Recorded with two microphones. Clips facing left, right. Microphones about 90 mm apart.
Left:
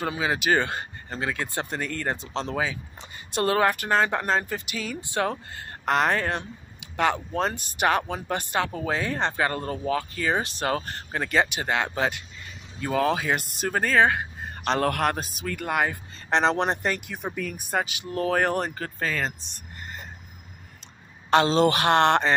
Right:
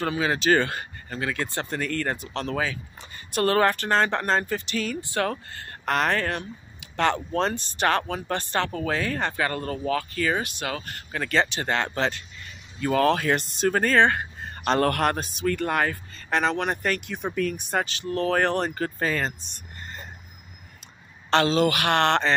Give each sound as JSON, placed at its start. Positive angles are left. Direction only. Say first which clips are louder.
{"t": 0.0, "sound": "speech", "louder": "right 2 dB", "side_deg": 15}
{"t": 3.5, "sound": "speech", "louder": "even", "side_deg": 10}
{"t": 7.0, "sound": "speech", "louder": "right 1 dB", "side_deg": 10}
{"t": 11.3, "sound": "speech", "louder": "even", "side_deg": 15}
{"t": 16.3, "sound": "speech", "louder": "left 2 dB", "side_deg": 30}
{"t": 17.1, "sound": "speech", "louder": "right 4 dB", "side_deg": 10}
{"t": 21.5, "sound": "speech", "louder": "left 2 dB", "side_deg": 30}